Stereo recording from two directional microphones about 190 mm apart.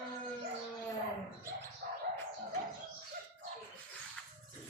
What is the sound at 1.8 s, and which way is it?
Bird, 55° right (ahead or behind).